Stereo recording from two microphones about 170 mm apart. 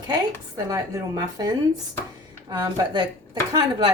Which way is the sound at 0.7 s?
20° right (ahead or behind).